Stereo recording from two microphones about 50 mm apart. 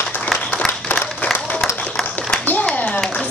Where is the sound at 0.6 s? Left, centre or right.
Left.